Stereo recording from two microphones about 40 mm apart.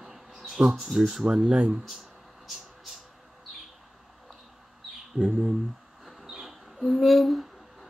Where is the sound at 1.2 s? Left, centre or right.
Centre.